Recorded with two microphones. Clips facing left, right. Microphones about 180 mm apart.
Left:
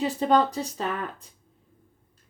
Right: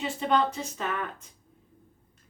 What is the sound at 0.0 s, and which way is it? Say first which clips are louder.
Speech: left 4 dB; 40° left (ahead or behind).